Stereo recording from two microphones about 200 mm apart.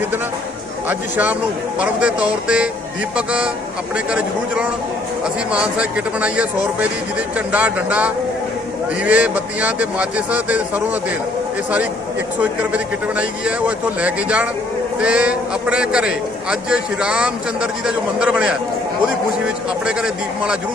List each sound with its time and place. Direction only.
0.9 s a man's voice: 10° right (ahead or behind)
12.4 s a man's voice: 5° right (ahead or behind)